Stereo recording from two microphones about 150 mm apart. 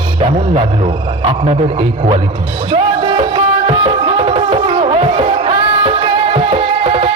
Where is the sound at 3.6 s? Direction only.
40° right (ahead or behind).